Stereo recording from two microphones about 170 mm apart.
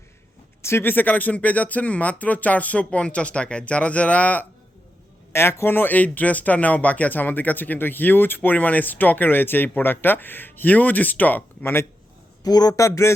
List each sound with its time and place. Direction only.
0.6 s a man's voice: 15° left (ahead or behind)